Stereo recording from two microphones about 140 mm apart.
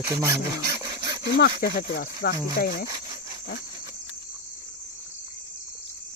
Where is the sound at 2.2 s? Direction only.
90° left.